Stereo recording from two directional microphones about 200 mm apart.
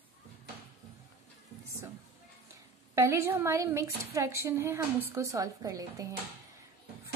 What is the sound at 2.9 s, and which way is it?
A woman's voice, 15° right (ahead or behind).